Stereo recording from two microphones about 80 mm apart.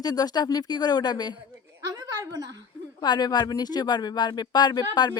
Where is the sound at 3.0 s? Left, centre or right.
Left.